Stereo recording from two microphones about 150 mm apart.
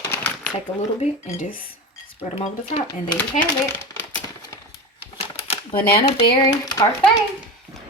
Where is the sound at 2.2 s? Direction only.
40° left (ahead or behind).